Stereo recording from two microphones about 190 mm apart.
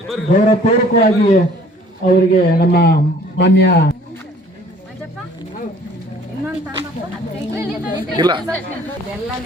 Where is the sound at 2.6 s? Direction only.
55° left (ahead or behind).